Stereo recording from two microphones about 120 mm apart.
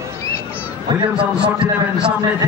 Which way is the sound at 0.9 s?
40° right (ahead or behind).